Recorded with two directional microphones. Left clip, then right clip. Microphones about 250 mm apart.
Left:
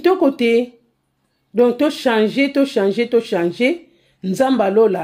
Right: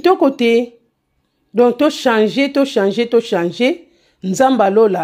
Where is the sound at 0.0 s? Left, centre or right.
Centre.